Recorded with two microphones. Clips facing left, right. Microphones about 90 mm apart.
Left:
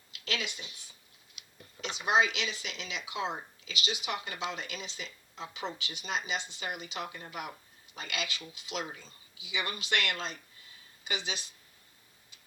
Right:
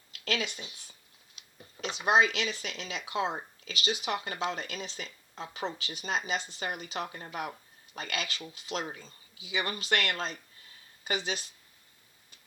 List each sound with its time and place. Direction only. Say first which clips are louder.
0.1 s speech: right 4 dB; 45° right (ahead or behind)